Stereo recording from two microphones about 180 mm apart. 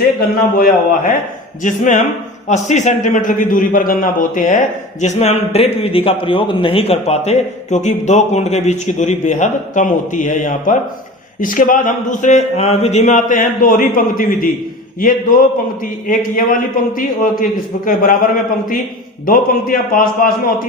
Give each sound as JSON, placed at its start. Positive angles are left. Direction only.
{"t": 0.2, "sound": "a man's voice", "side_deg": 50}
{"t": 15.8, "sound": "speech", "side_deg": 50}